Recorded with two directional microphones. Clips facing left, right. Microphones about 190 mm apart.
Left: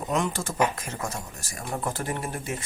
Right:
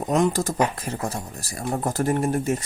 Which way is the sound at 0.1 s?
40° right (ahead or behind).